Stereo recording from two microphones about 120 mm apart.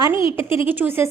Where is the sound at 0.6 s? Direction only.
15° right (ahead or behind).